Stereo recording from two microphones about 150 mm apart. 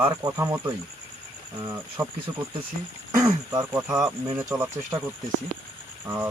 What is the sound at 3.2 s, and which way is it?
Speech, 20° right (ahead or behind).